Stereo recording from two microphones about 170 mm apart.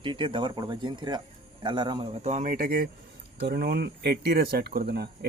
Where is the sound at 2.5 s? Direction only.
60° right (ahead or behind).